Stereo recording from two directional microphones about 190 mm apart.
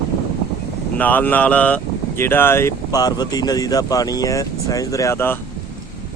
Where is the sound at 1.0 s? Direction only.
10° left (ahead or behind).